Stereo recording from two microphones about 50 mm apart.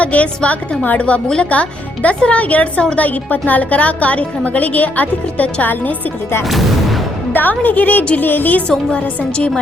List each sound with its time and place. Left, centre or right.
0.0 s a woman's voice: left
7.3 s a woman's voice: left